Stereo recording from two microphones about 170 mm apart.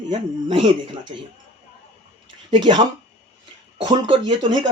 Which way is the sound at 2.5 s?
25° right (ahead or behind).